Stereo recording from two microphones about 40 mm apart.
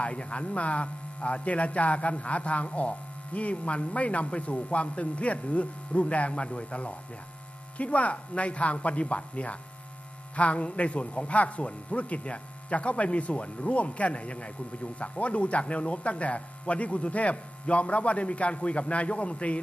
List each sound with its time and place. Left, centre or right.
0.0 s speech: left